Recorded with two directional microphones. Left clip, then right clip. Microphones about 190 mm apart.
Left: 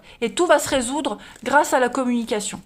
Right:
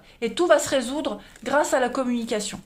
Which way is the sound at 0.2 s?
35° left (ahead or behind).